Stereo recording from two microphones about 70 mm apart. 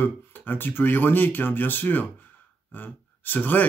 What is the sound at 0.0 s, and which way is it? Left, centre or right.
Speech, left.